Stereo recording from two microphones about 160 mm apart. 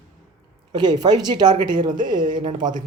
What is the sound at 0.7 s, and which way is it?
Speech, 25° right (ahead or behind).